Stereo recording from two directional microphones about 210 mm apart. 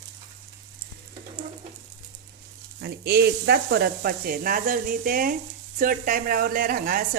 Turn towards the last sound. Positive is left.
turn(degrees=-45)  # may be behind; listen again after turning